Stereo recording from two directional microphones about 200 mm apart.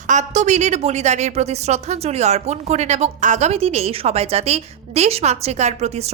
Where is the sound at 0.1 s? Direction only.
35° right (ahead or behind).